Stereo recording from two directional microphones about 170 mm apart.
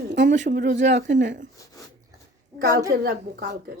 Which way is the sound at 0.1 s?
50° right (ahead or behind).